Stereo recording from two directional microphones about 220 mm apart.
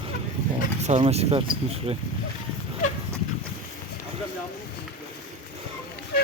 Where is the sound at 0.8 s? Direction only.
30° right (ahead or behind).